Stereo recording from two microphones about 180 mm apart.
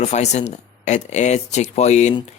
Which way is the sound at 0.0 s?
40° left (ahead or behind).